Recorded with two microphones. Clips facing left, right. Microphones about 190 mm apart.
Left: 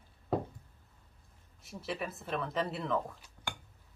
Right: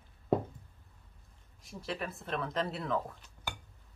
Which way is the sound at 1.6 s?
Centre (ahead or behind).